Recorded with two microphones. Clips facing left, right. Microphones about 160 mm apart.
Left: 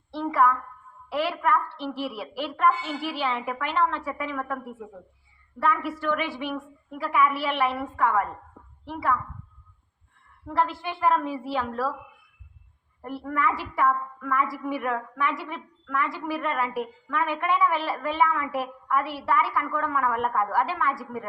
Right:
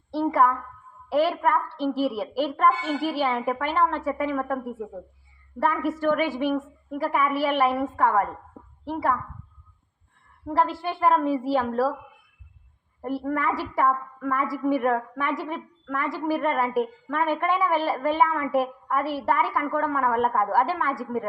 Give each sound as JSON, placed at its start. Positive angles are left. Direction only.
{"t": 0.1, "sound": "a woman's voice", "side_deg": -40}
{"t": 10.4, "sound": "a woman's voice", "side_deg": -40}
{"t": 13.0, "sound": "a woman's voice", "side_deg": -40}